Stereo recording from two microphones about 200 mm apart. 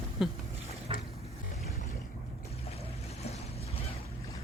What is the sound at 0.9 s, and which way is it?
Boat, 30° right (ahead or behind).